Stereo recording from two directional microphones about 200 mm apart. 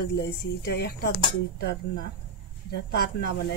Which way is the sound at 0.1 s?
55° left (ahead or behind).